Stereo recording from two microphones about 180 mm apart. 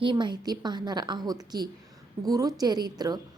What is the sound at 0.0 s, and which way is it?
A woman's voice, 25° right (ahead or behind).